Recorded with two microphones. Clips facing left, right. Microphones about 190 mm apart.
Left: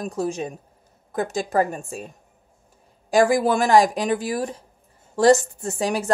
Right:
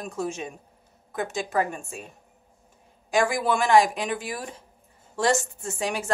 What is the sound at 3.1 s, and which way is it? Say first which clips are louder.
A woman's voice: left 6 dB; 40° left (ahead or behind).